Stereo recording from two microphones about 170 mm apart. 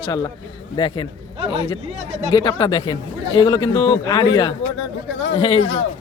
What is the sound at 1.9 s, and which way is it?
Speech, 40° right (ahead or behind).